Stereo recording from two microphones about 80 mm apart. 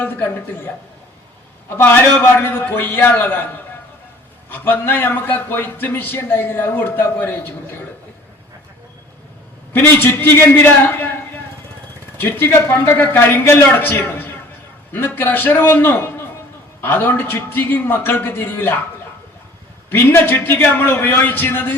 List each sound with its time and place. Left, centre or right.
0.0 s a man's voice: left
1.7 s a man's voice: left
4.4 s a man's voice: left
9.7 s a man's voice: left
19.9 s a man's voice: left